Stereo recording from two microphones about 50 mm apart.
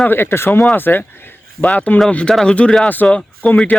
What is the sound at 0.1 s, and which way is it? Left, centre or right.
Speech, left.